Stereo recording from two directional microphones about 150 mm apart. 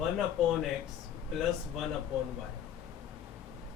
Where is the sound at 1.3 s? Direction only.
Centre (ahead or behind).